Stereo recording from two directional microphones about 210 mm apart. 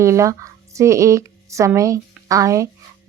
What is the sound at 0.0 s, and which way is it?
A woman's voice, 15° right (ahead or behind).